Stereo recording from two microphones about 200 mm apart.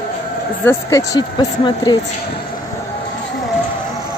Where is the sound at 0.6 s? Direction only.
15° left (ahead or behind).